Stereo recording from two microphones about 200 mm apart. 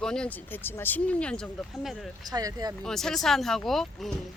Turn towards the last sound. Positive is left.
turn(degrees=0)  # may be behind; listen again after turning